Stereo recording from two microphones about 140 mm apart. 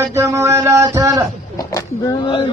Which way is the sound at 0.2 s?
20° right (ahead or behind).